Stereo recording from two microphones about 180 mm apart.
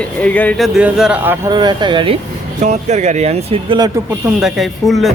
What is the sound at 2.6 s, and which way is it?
Speech, 40° right (ahead or behind).